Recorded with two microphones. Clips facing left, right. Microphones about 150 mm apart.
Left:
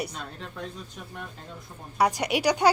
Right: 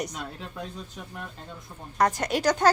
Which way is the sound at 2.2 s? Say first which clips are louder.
Even; 15° left (ahead or behind).